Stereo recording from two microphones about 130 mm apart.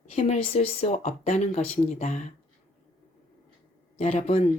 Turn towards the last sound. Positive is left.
turn(degrees=60)  # may be behind; listen again after turning